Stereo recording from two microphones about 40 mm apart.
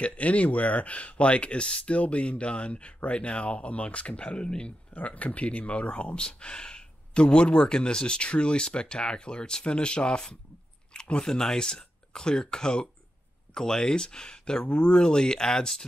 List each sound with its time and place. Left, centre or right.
0.0 s speech: left
4.9 s speech: left; by 15.8 s centre